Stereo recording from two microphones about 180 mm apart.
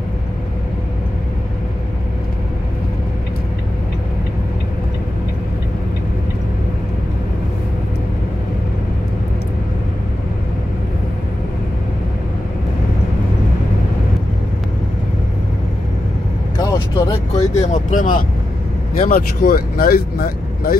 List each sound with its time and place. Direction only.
16.6 s vehicle: 20° left (ahead or behind)
17.4 s speech: 40° left (ahead or behind); by 20.7 s 55° left (ahead or behind)